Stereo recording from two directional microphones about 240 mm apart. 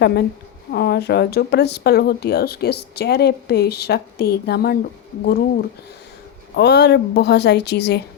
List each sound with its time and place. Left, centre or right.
0.0 s a woman's voice: left
6.6 s a woman's voice: left